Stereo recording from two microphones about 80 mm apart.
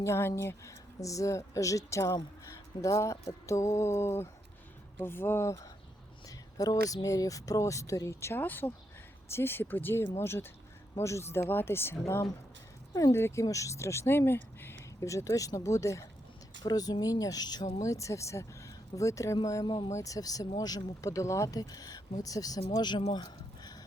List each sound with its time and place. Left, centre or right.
0.0 s speech: left
6.2 s speech: left
13.4 s speech: left
15.0 s speech: left
16.6 s speech: left
17.8 s speech: left
19.6 s speech: left
19.9 s speech: left